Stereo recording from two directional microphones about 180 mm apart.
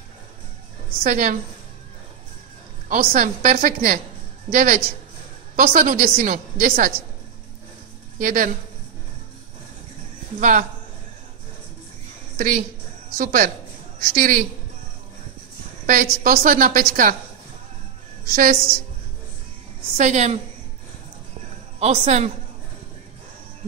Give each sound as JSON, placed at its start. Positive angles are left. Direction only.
{"t": 1.0, "sound": "a woman's voice", "side_deg": -50}
{"t": 2.9, "sound": "a woman's voice", "side_deg": -50}
{"t": 8.2, "sound": "a woman's voice", "side_deg": -50}
{"t": 12.4, "sound": "a woman's voice", "side_deg": -50}
{"t": 15.9, "sound": "a woman's voice", "side_deg": -50}
{"t": 18.2, "sound": "a woman's voice", "side_deg": -50}
{"t": 20.0, "sound": "a man's voice", "side_deg": -40}
{"t": 21.7, "sound": "a man's voice", "side_deg": -35}